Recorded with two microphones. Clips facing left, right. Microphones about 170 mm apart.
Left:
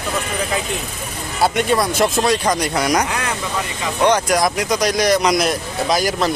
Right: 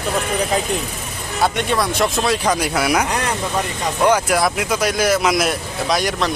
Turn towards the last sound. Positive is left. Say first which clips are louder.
# left 2 dB
turn(degrees=0)  # may be behind; listen again after turning